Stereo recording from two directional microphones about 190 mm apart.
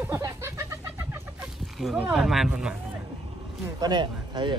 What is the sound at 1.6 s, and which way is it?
Speech, centre (ahead or behind).